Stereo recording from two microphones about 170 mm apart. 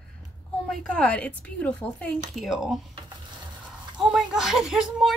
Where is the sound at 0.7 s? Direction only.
5° left (ahead or behind).